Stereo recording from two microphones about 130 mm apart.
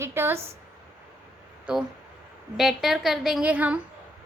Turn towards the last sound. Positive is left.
turn(degrees=-10)  # may be behind; listen again after turning